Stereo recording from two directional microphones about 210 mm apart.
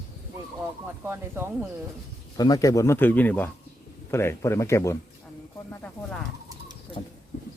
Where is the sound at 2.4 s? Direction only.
15° left (ahead or behind).